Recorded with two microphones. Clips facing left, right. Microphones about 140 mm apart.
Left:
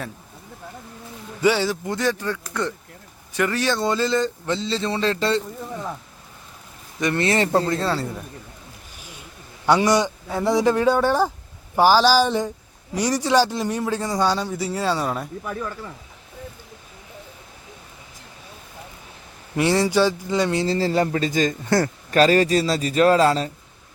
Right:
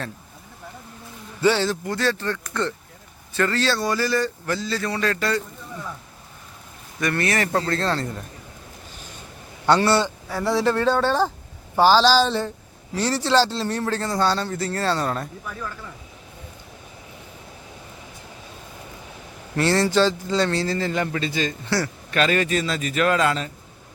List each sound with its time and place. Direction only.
1.4 s a man's voice: 10° left (ahead or behind)
7.0 s speech: 20° left (ahead or behind)
7.7 s a man's voice: 10° left (ahead or behind)
9.6 s a man's voice: 10° left (ahead or behind)
19.5 s a man's voice: 15° left (ahead or behind)
20.7 s a man's voice: 30° left (ahead or behind)